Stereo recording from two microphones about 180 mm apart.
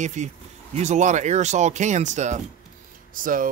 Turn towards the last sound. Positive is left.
turn(degrees=-50)  # may be behind; listen again after turning